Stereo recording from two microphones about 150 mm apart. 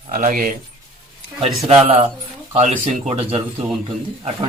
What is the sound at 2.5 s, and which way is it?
Speech, 50° right (ahead or behind).